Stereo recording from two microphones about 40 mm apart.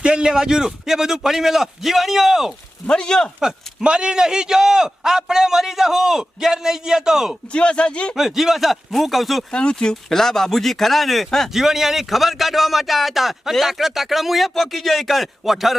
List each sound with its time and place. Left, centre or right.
0.0 s a man's voice: right; by 2.6 s centre
2.8 s speech: centre
3.8 s a man's voice: right
7.5 s speech: left
8.1 s speech: centre
9.5 s speech: left
11.5 s speech: centre